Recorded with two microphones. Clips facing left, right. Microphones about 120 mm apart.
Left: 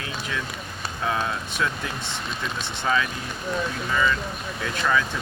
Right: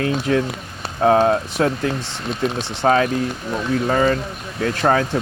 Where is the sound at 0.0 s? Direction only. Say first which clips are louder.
Right 13 dB; 50° right (ahead or behind).